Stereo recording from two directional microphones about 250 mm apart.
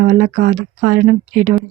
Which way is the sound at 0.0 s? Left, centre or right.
Right.